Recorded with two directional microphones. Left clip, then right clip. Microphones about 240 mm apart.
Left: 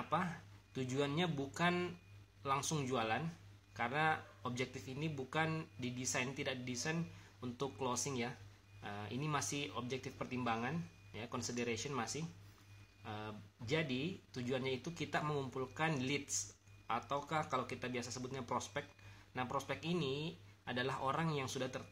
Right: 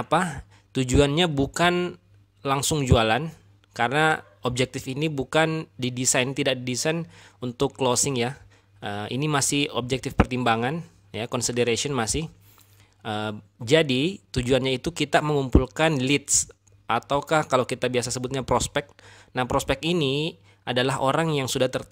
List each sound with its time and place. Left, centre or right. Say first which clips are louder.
0.1 s speech: right 16 dB; right